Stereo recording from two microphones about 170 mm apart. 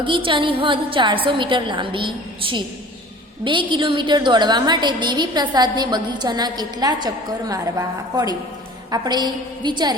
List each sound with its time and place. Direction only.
0.0 s a woman's voice: 30° right (ahead or behind)